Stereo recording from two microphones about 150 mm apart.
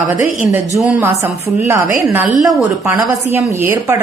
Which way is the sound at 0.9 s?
10° right (ahead or behind).